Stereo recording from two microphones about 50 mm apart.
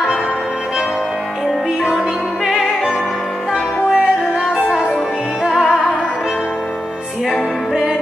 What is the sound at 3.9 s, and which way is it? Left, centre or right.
Music, centre.